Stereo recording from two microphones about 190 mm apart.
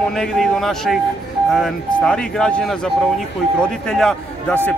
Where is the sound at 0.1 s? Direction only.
5° left (ahead or behind).